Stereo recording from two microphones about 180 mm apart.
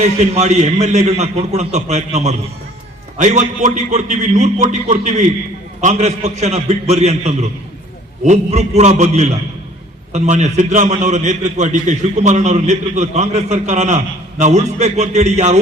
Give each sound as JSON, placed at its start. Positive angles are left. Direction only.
{"t": 0.0, "sound": "a man's voice", "side_deg": -40}